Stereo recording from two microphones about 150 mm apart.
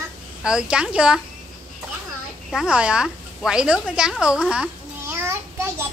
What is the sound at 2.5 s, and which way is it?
A woman's voice, 5° right (ahead or behind).